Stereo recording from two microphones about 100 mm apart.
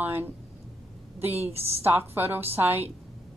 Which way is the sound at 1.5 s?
90° right.